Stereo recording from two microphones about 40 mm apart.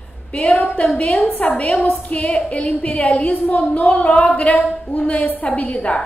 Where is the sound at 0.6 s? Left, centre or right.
Left.